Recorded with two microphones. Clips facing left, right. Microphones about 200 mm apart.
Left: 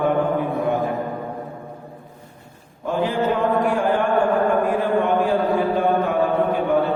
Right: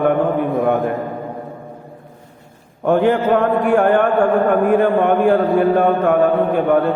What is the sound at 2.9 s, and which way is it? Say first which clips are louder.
A man's voice: right 7 dB; 60° right (ahead or behind).